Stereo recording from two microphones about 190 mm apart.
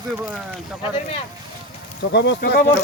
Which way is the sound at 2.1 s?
65° left (ahead or behind).